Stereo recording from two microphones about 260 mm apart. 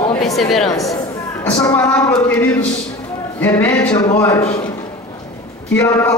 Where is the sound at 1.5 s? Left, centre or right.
Centre.